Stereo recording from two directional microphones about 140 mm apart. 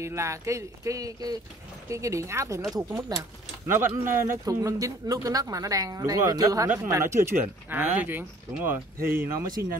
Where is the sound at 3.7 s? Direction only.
15° right (ahead or behind).